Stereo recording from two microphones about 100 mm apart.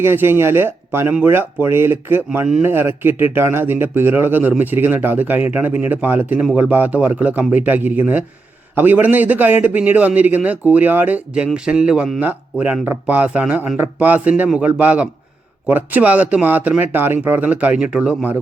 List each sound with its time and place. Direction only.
0.0 s speech: 25° right (ahead or behind); by 12.2 s 5° right (ahead or behind)
12.2 s speech: 15° right (ahead or behind)